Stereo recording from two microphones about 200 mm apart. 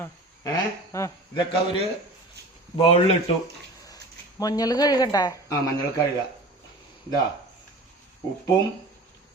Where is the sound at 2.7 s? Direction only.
30° left (ahead or behind).